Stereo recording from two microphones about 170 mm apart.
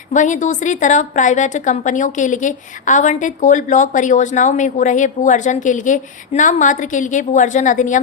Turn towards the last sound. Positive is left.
turn(degrees=50)  # may be behind; listen again after turning